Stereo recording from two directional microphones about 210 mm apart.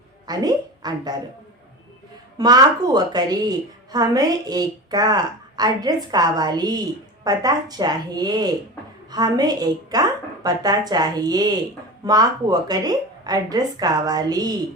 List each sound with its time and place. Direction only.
0.3 s speech: 20° right (ahead or behind)
2.4 s a woman's voice: 20° right (ahead or behind)